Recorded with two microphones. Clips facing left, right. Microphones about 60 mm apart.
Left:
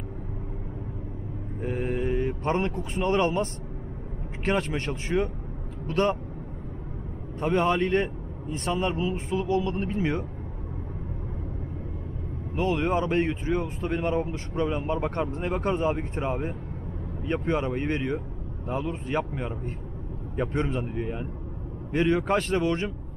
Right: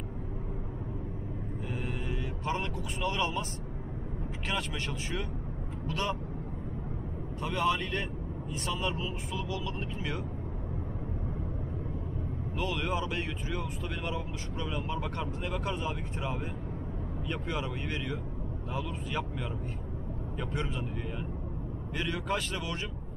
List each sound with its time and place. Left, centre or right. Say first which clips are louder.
1.6 s vehicle: left 11 dB; left
4.5 s speech: left 9 dB; left
7.3 s speech: left 6 dB; left
12.5 s speech: left 8 dB; left